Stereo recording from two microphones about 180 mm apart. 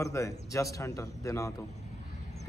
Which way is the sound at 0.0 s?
15° left (ahead or behind).